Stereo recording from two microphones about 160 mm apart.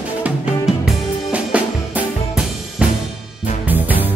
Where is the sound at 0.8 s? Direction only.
10° right (ahead or behind).